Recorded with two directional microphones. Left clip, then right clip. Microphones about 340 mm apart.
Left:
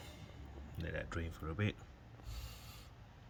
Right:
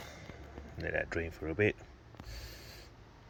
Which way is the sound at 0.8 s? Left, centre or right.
Centre.